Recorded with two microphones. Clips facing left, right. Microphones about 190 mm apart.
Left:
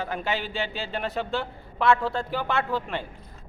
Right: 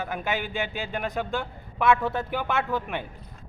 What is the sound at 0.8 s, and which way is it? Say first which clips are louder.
Speech: even; 15° right (ahead or behind).